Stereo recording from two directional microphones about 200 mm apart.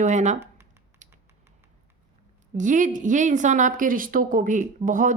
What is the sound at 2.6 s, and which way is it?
A woman's voice, 40° right (ahead or behind).